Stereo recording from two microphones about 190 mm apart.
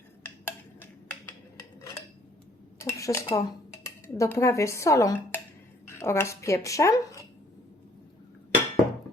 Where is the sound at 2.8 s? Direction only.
15° left (ahead or behind).